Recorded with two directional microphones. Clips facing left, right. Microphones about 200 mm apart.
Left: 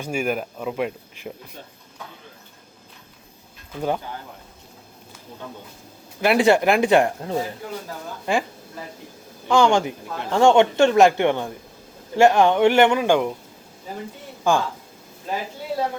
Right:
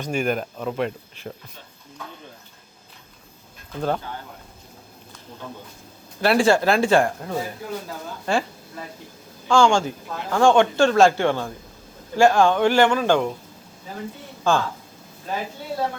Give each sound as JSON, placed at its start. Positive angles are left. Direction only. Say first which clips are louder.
{"t": 0.0, "sound": "speech", "louder": "right 1 dB", "side_deg": 10}
{"t": 3.8, "sound": "speech", "louder": "even", "side_deg": 10}
{"t": 6.2, "sound": "speech", "louder": "left 1 dB", "side_deg": 20}
{"t": 9.5, "sound": "speech", "louder": "even", "side_deg": 20}
{"t": 14.5, "sound": "speech", "louder": "left 1 dB", "side_deg": 15}